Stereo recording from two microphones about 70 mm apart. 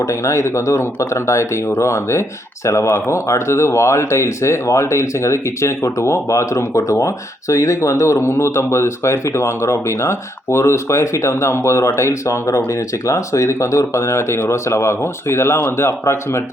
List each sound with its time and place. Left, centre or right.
0.0 s speech: left